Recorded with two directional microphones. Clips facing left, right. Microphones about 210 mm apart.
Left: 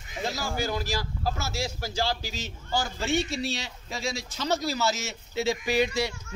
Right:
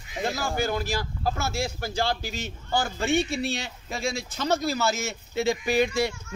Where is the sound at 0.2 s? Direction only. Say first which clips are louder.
Right 3 dB; 55° right (ahead or behind).